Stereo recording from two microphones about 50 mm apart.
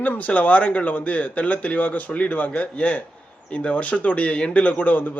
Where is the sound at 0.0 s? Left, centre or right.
Left.